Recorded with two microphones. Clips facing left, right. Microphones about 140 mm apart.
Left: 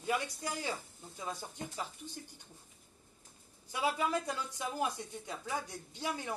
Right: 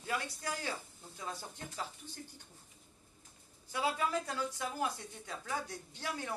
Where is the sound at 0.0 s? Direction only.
15° left (ahead or behind).